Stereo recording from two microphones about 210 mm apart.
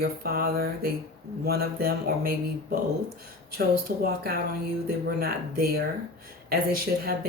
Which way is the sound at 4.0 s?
45° right (ahead or behind).